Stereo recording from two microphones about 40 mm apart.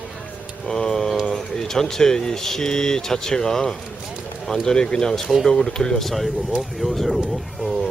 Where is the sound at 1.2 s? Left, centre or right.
Centre.